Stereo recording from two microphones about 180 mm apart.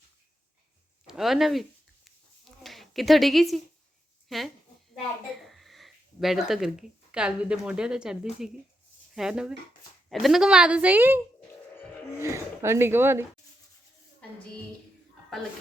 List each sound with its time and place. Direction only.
1.0 s speech: centre (ahead or behind)
2.0 s a sound: centre (ahead or behind)
4.3 s a woman's voice: centre (ahead or behind)
12.2 s speech: 15° right (ahead or behind)